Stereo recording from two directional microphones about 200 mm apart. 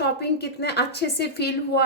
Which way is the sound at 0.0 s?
55° left (ahead or behind).